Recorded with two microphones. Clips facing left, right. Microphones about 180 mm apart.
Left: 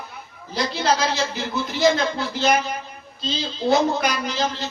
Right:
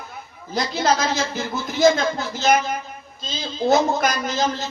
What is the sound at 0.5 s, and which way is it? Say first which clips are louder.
Speech: right 1 dB; 45° right (ahead or behind).